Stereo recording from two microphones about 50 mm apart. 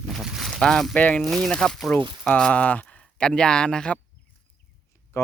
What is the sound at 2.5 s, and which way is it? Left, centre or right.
Speech, left.